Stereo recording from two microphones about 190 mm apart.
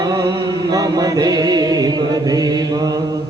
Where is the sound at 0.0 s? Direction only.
20° right (ahead or behind).